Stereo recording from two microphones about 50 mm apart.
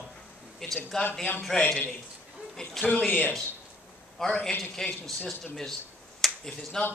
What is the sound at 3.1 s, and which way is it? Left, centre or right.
Speech, left.